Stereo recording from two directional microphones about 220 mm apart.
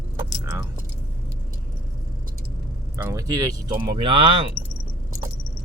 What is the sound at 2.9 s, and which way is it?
Speech, 15° right (ahead or behind).